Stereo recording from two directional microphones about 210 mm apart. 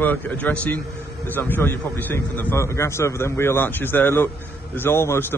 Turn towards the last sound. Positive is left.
turn(degrees=10)  # may be behind; listen again after turning